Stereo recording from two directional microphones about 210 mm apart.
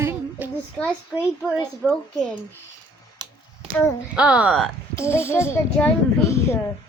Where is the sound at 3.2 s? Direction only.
20° right (ahead or behind).